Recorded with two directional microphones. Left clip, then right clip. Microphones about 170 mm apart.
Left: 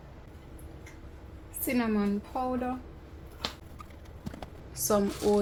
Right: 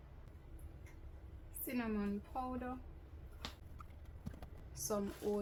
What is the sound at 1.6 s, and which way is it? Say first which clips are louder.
A woman's voice: left 12 dB; 5° left (ahead or behind).